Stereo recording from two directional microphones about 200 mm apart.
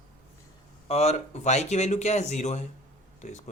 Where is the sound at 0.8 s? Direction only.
30° left (ahead or behind).